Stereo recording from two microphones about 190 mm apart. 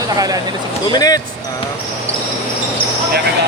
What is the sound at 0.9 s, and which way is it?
Speech, 20° left (ahead or behind).